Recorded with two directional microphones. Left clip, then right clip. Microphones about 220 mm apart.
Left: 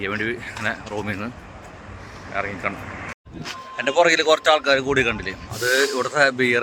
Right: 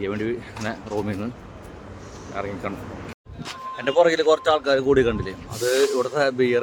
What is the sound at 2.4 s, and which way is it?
Speech, 5° right (ahead or behind).